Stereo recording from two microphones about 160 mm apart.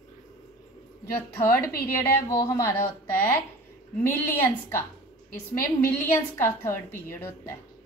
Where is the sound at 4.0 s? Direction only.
15° left (ahead or behind).